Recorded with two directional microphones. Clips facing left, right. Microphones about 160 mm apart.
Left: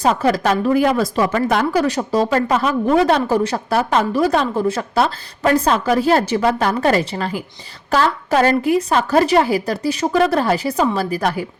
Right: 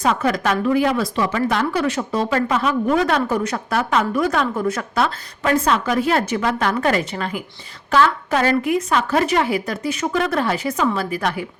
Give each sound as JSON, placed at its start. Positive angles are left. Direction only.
{"t": 0.0, "sound": "speech", "side_deg": 35}